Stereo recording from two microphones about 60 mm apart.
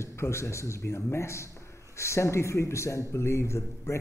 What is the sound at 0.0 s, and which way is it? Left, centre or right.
Speech, left.